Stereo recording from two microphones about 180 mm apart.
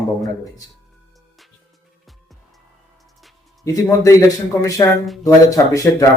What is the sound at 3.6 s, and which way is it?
A man's voice, 20° left (ahead or behind).